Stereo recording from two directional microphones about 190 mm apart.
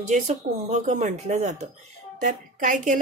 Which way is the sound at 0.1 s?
40° right (ahead or behind).